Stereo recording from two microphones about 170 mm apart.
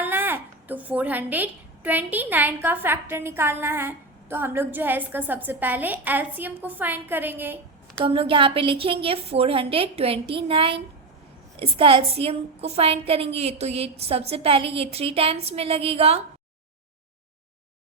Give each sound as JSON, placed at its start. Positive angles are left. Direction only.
{"t": 0.0, "sound": "a woman's voice", "side_deg": -10}
{"t": 8.0, "sound": "a woman's voice", "side_deg": -30}